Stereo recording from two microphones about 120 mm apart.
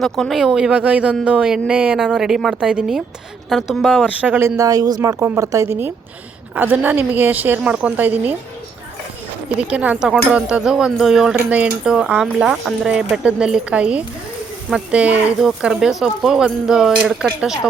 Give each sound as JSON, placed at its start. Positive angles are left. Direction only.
{"t": 0.0, "sound": "speech", "side_deg": 0}
{"t": 4.2, "sound": "a woman's voice", "side_deg": -15}
{"t": 9.6, "sound": "speech", "side_deg": -10}